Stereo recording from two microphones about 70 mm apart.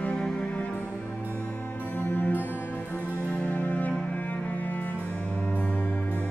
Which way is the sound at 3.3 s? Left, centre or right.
Centre.